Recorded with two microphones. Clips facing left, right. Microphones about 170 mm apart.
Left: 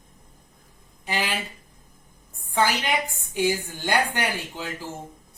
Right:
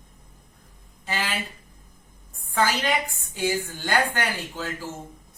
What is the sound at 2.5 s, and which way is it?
Speech, 15° left (ahead or behind).